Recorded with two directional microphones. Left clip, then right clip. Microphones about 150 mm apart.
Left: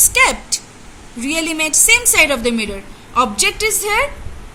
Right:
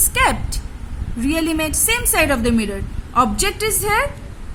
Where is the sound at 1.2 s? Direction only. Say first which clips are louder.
Left 1 dB; 75° right (ahead or behind).